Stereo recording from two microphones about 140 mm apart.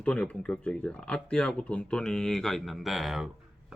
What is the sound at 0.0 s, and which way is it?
Speech, 10° left (ahead or behind).